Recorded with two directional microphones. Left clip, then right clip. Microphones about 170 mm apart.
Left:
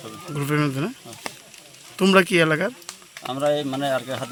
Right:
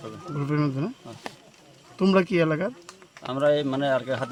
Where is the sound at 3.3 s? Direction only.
25° right (ahead or behind).